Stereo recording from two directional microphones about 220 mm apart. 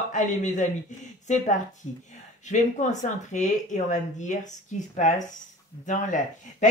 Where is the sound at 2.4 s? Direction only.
35° left (ahead or behind).